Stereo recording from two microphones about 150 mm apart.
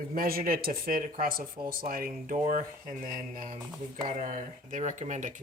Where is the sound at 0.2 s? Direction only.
80° right.